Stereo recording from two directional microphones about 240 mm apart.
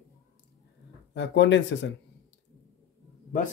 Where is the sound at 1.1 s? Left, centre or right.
Left.